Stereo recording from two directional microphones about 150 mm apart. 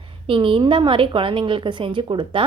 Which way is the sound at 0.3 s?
35° right (ahead or behind).